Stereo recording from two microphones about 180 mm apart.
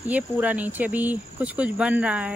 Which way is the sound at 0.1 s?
10° right (ahead or behind).